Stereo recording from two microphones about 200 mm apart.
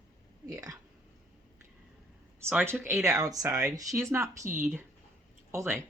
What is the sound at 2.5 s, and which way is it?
Speech, 10° right (ahead or behind).